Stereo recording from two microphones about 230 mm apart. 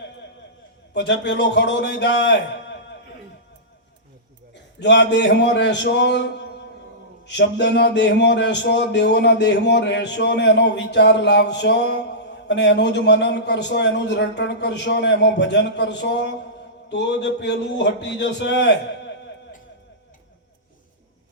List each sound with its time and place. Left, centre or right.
0.9 s speech: left
4.5 s speech: left